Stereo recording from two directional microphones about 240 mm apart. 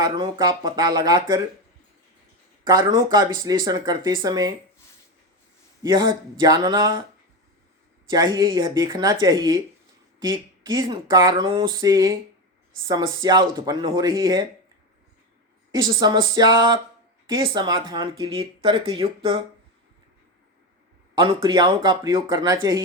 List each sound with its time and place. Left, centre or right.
0.0 s speech: centre
2.6 s speech: centre
5.8 s speech: centre
8.8 s speech: centre
15.7 s speech: centre
21.2 s speech: centre